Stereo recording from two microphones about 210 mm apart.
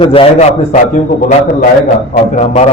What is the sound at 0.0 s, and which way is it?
Speech, 25° left (ahead or behind).